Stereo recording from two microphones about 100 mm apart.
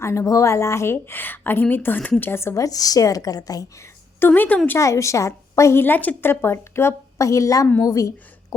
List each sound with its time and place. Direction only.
0.0 s a woman's voice: 30° left (ahead or behind)
4.3 s a woman's voice: 15° left (ahead or behind)
4.8 s a woman's voice: 30° left (ahead or behind)